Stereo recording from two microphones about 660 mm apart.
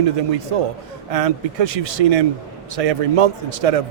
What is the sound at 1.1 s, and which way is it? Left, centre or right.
A man's voice, right.